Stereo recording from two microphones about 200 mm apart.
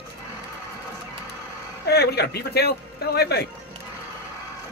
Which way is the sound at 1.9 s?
55° left (ahead or behind).